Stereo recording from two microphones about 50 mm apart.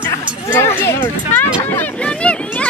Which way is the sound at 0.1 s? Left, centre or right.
Left.